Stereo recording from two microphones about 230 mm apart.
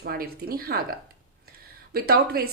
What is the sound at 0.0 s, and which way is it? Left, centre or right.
Speech, right.